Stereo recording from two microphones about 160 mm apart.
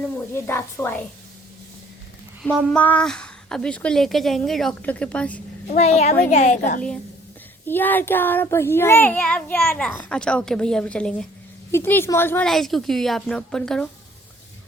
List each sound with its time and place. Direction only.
0.3 s child singing: 15° left (ahead or behind)
2.4 s a woman's voice: 5° left (ahead or behind)
5.7 s a child's voice: 45° left (ahead or behind)
7.7 s child singing: 10° left (ahead or behind)
12.5 s a woman's voice: centre (ahead or behind)